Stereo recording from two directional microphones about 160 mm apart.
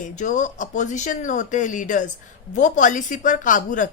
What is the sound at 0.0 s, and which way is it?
Speech, 50° left (ahead or behind).